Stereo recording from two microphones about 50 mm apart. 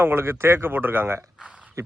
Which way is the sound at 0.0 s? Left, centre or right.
Right.